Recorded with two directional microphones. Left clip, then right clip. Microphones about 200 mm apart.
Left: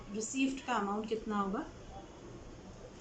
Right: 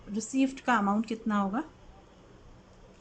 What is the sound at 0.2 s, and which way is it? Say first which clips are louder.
A woman's voice: right 5 dB; 50° right (ahead or behind).